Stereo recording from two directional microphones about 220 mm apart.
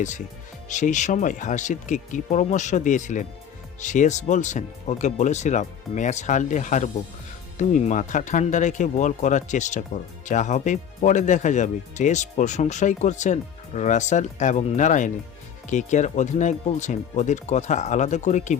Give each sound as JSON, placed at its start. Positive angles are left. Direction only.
{"t": 0.7, "sound": "speech", "side_deg": 35}